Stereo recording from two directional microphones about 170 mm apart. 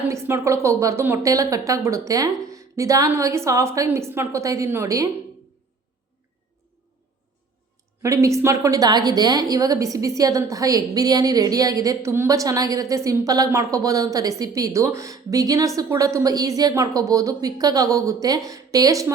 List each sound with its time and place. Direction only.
0.1 s a woman's voice: 15° right (ahead or behind)
8.0 s a woman's voice: 20° right (ahead or behind)